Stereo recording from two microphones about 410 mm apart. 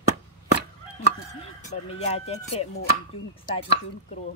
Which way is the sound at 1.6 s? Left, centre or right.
Centre.